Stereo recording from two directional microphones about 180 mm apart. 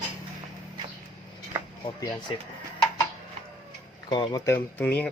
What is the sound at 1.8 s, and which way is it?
Speech, 25° left (ahead or behind).